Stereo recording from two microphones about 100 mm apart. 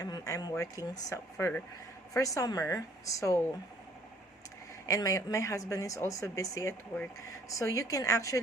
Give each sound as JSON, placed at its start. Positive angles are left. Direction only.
{"t": 0.0, "sound": "a woman's voice", "side_deg": 35}
{"t": 1.4, "sound": "a woman's voice", "side_deg": 25}
{"t": 4.9, "sound": "a woman's voice", "side_deg": 35}